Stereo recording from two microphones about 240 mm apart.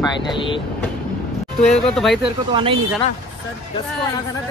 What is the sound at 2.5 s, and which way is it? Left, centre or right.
Speech, right.